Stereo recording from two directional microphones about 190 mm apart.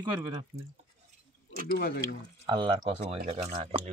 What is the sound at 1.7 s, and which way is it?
Speech, 50° left (ahead or behind).